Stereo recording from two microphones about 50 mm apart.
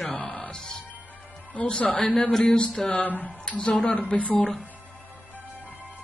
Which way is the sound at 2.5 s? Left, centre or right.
Centre.